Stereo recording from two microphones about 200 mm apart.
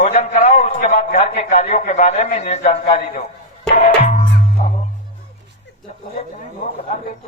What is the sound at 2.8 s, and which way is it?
Speech, 45° left (ahead or behind).